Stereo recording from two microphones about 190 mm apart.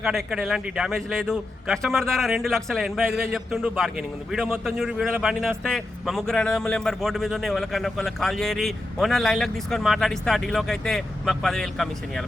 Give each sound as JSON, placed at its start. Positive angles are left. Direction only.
{"t": 0.0, "sound": "a man's voice", "side_deg": 0}